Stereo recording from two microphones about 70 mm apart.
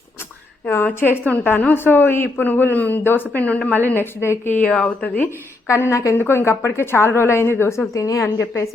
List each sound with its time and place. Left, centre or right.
0.9 s a woman's voice: left
3.8 s a woman's voice: left
4.6 s speech: centre
5.0 s a man's voice: left
5.6 s a woman's voice: left
6.1 s a woman's voice: left
7.9 s a woman's voice: left